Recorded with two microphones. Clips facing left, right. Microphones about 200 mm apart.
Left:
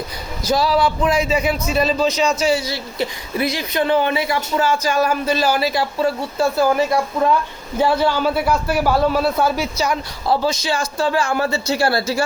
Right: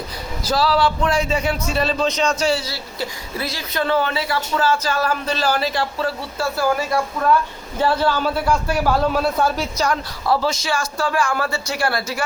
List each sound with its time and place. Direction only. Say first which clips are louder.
0.5 s a man's voice: left 1 dB; 15° left (ahead or behind)
10.2 s a man's voice: left 1 dB; 20° left (ahead or behind)